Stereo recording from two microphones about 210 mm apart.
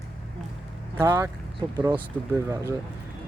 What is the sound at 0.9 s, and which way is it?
Speech, 15° right (ahead or behind).